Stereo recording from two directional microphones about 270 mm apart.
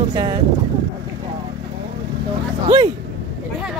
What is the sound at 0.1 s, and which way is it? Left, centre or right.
Speech, centre.